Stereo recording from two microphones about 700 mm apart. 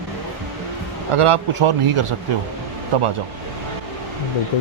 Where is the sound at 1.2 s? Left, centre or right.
Right.